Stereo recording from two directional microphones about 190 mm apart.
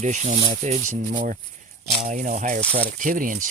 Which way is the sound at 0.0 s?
40° right (ahead or behind).